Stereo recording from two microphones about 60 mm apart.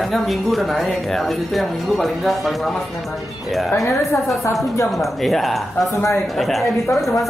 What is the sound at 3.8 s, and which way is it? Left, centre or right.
Speech, left.